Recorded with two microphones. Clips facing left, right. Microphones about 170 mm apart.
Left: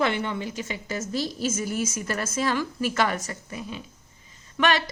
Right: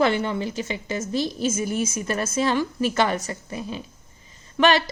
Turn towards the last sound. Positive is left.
turn(degrees=-30)  # may be behind; listen again after turning